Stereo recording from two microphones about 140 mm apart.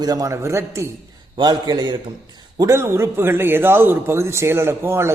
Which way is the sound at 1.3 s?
30° right (ahead or behind).